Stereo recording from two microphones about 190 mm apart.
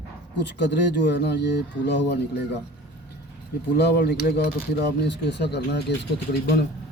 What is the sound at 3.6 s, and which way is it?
A man's voice, 60° left (ahead or behind).